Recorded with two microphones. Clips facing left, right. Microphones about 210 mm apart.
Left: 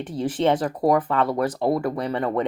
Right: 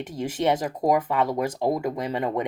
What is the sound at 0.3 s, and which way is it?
Speech, 10° right (ahead or behind).